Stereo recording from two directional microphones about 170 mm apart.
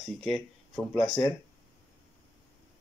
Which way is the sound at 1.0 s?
25° left (ahead or behind).